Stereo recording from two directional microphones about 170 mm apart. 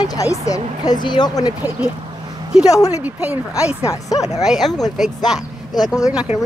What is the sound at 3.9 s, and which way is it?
Speech, 20° left (ahead or behind).